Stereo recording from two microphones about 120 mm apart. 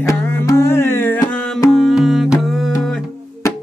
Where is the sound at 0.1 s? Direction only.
25° left (ahead or behind).